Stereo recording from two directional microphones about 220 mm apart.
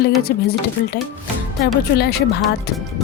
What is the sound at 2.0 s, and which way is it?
Speech, 45° left (ahead or behind).